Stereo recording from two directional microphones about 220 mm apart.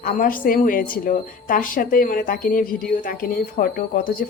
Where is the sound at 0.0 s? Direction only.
40° left (ahead or behind).